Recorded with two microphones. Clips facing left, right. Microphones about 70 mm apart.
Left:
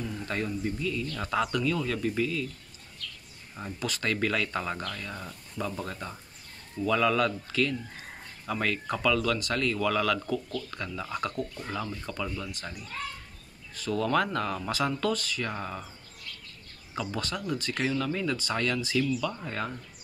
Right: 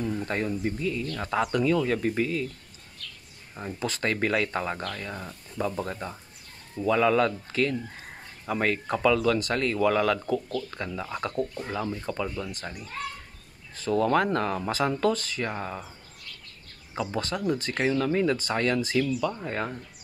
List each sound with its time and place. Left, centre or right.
0.0 s a sound: right
0.7 s speech: right
3.8 s speech: right
13.7 s speech: right
15.5 s speech: centre
16.9 s speech: right